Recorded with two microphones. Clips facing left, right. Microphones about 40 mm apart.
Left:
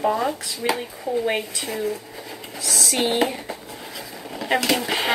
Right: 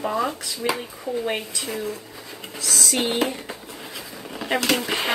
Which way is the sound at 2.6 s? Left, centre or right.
Left.